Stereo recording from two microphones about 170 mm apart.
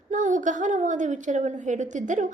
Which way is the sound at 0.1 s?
50° right (ahead or behind).